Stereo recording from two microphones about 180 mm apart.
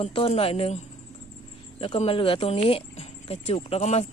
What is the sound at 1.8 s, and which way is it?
Speech, 35° left (ahead or behind).